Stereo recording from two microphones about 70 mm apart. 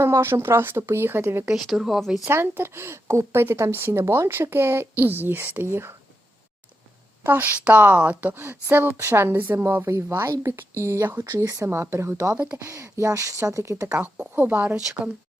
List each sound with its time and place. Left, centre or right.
0.0 s speech: right
1.5 s speech: centre
2.3 s speech: right
7.3 s a woman's voice: right
9.8 s speech: right
13.8 s a woman's voice: right